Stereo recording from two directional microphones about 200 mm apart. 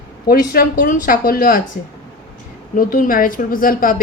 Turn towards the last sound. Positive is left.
turn(degrees=45)  # may be behind; listen again after turning